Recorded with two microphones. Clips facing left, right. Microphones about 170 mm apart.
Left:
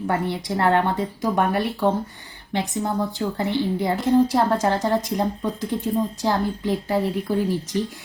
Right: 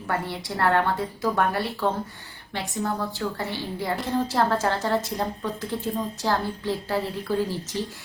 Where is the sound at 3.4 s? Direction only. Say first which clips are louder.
Left 8 dB; 20° left (ahead or behind).